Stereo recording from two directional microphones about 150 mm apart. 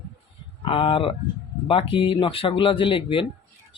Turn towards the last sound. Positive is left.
turn(degrees=35)  # may be behind; listen again after turning